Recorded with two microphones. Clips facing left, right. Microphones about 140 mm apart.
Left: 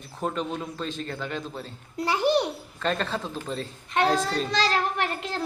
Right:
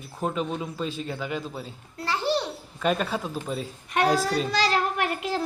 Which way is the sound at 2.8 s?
10° right (ahead or behind).